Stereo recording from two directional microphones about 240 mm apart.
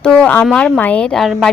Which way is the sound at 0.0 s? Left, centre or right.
Centre.